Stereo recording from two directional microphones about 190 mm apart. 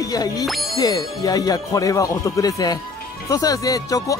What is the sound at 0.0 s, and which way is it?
Speech, 20° left (ahead or behind).